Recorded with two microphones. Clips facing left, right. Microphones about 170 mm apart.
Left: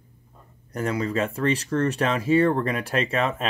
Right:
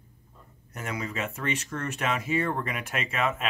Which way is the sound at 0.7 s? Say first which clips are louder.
Left 9 dB; 35° left (ahead or behind).